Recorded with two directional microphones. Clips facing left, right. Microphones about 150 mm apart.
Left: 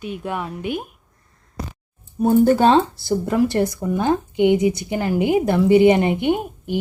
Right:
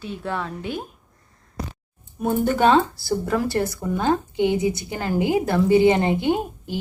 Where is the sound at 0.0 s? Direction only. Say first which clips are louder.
Left 2 dB; 15° left (ahead or behind).